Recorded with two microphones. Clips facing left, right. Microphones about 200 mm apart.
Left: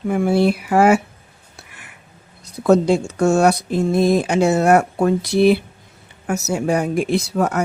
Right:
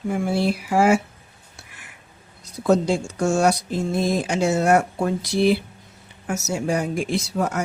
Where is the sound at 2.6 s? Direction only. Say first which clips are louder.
Left 5 dB; 60° left (ahead or behind).